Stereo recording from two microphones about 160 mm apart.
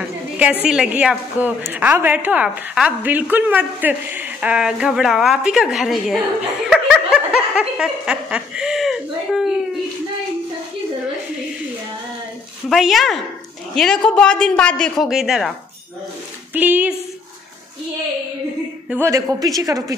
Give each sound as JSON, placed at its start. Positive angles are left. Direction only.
{"t": 0.4, "sound": "a woman's voice", "side_deg": -5}
{"t": 6.7, "sound": "snicker", "side_deg": -5}
{"t": 12.6, "sound": "snicker", "side_deg": 0}
{"t": 16.5, "sound": "a woman's voice", "side_deg": -10}
{"t": 18.9, "sound": "a woman's voice", "side_deg": -15}